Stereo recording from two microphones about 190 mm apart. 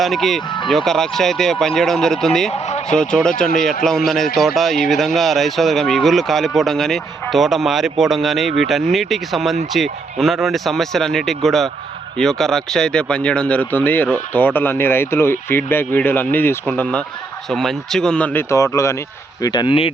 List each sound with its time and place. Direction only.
0.0 s a man's voice: centre (ahead or behind)
2.5 s a sound: 35° left (ahead or behind)
2.9 s a man's voice: 5° left (ahead or behind); by 19.9 s 25° left (ahead or behind)